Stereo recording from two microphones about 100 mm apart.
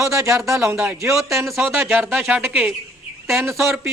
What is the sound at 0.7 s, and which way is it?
A man's voice, 10° right (ahead or behind).